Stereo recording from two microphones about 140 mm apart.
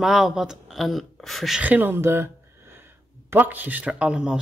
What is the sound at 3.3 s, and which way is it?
Speech, 15° right (ahead or behind).